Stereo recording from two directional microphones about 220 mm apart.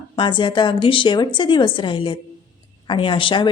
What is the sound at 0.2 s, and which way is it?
A woman's voice, 20° left (ahead or behind).